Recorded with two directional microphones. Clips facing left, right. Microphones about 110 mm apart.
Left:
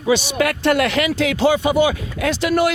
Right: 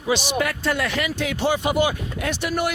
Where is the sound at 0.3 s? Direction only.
80° left.